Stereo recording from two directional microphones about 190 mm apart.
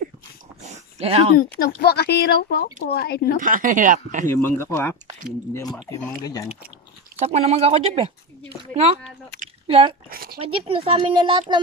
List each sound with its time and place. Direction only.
0.7 s dog: 35° right (ahead or behind)
1.6 s speech: 55° left (ahead or behind)
3.3 s speech: 45° right (ahead or behind)
4.3 s speech: 15° left (ahead or behind)
7.2 s speech: 35° right (ahead or behind)
9.7 s speech: 30° right (ahead or behind)
10.0 s speech: 50° right (ahead or behind)
10.4 s speech: 30° right (ahead or behind)